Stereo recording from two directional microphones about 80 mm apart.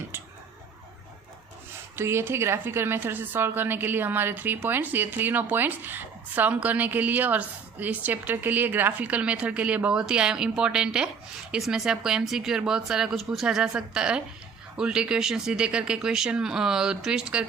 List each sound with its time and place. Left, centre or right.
2.0 s a woman's voice: right; by 17.4 s centre